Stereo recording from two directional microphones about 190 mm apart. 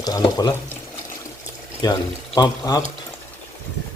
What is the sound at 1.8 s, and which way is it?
Speech, 20° left (ahead or behind).